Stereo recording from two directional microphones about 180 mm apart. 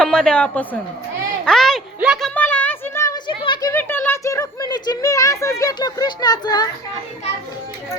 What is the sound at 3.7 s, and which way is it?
Speech, 10° left (ahead or behind).